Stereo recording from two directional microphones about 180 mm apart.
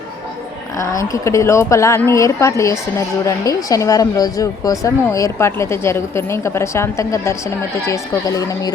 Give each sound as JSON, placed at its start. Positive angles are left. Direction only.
{"t": 0.8, "sound": "speech", "side_deg": 15}